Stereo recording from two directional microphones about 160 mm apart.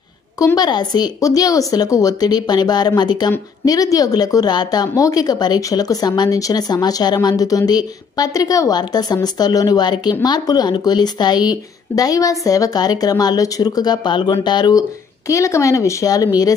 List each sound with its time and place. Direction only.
0.4 s speech: 25° left (ahead or behind)